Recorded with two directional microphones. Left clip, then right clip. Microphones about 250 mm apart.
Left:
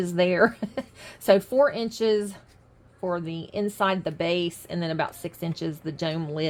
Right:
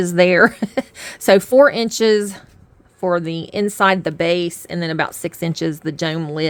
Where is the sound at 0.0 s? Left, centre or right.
Right.